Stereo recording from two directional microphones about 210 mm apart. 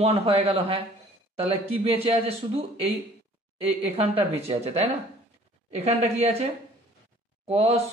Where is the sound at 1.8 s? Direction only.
25° right (ahead or behind).